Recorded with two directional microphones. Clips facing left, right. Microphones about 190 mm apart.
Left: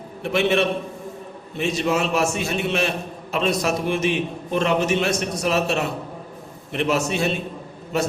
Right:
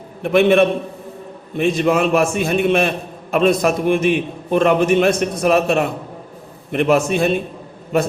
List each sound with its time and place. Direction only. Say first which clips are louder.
0.2 s a man's voice: right 7 dB; 55° right (ahead or behind)